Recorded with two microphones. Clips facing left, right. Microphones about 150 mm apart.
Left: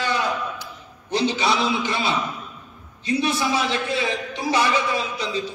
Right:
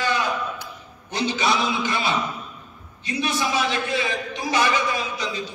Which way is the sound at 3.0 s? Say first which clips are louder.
Left 3 dB; 30° left (ahead or behind).